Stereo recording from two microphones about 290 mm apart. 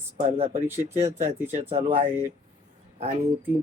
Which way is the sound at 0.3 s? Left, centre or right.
Centre.